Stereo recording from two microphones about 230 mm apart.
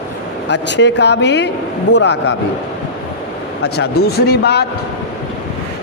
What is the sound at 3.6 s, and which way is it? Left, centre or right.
A man's voice, left.